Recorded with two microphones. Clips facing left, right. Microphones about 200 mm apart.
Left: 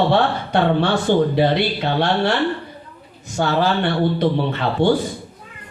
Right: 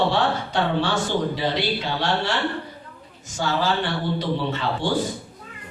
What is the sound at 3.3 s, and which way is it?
Speech, 60° left (ahead or behind).